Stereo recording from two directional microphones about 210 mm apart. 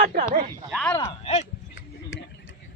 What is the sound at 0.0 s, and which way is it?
Speech, 40° right (ahead or behind).